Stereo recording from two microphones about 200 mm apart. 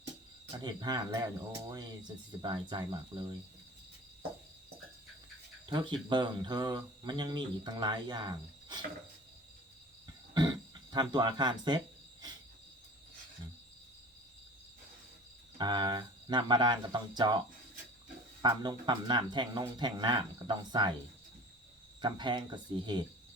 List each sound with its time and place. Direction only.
0.5 s speech: 20° right (ahead or behind)
5.6 s speech: 25° right (ahead or behind)
10.9 s speech: 20° right (ahead or behind)
15.5 s speech: 20° right (ahead or behind)
18.4 s speech: 20° right (ahead or behind)
22.0 s speech: 25° right (ahead or behind)